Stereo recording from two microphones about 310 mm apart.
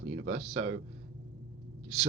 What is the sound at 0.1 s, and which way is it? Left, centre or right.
Speech, right.